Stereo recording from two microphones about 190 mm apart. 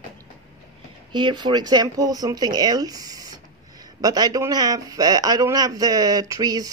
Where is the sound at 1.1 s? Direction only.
25° right (ahead or behind).